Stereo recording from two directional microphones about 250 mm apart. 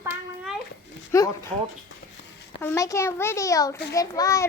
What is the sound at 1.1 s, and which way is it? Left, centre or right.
Speech, centre.